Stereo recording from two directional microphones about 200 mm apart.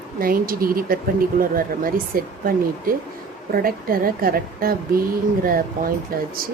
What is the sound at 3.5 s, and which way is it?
A woman's voice, 45° right (ahead or behind).